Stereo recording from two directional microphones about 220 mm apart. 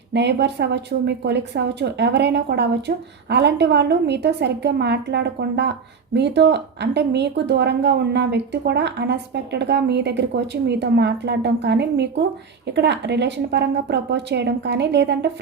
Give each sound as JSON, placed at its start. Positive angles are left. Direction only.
{"t": 0.1, "sound": "a woman's voice", "side_deg": -50}